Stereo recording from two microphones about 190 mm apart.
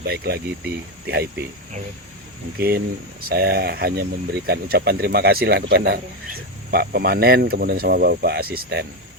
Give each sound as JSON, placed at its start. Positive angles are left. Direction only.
{"t": 0.1, "sound": "speech", "side_deg": -55}
{"t": 2.6, "sound": "speech", "side_deg": -55}